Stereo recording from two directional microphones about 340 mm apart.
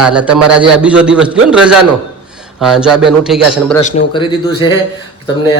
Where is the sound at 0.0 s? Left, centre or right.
Centre.